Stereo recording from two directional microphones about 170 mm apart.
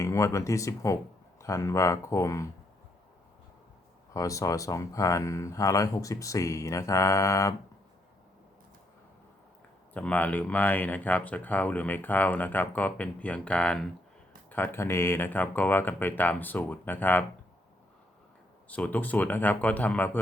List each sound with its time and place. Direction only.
0.0 s speech: 15° left (ahead or behind)
4.1 s speech: 20° left (ahead or behind)
9.9 s speech: 10° left (ahead or behind)
18.7 s speech: 10° left (ahead or behind)